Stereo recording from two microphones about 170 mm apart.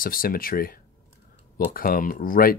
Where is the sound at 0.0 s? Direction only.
55° left (ahead or behind).